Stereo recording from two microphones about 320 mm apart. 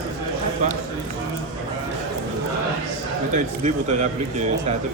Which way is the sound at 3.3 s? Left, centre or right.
Right.